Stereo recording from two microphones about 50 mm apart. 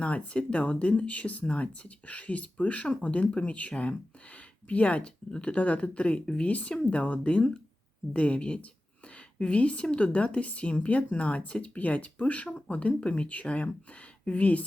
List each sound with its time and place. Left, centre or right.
0.0 s speech: left